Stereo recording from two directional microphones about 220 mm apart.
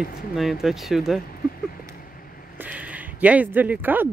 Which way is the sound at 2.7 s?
5° right (ahead or behind).